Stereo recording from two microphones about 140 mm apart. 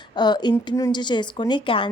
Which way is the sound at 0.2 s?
30° left (ahead or behind).